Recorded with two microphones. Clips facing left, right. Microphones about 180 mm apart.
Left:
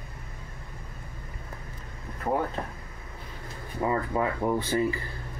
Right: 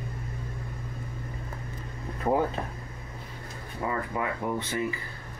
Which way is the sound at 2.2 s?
10° right (ahead or behind).